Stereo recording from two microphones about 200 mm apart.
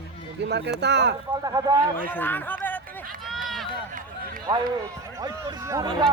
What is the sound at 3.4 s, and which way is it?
Run, centre (ahead or behind).